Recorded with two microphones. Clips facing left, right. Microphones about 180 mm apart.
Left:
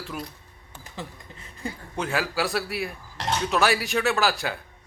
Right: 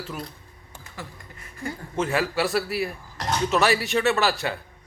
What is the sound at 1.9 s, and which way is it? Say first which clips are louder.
A man's voice: right 3 dB; centre (ahead or behind).